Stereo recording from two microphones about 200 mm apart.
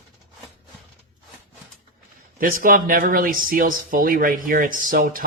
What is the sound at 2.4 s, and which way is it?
Speech, 45° right (ahead or behind).